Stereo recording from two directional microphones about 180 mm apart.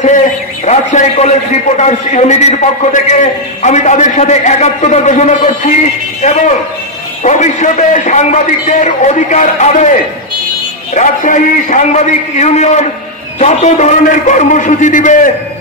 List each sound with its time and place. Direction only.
0.7 s a man's voice: 40° left (ahead or behind)
7.2 s a man's voice: 40° left (ahead or behind)
11.0 s a man's voice: 45° left (ahead or behind)